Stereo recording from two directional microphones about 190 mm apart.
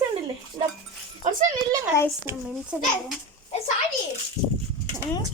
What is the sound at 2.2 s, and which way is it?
Speech, 5° right (ahead or behind).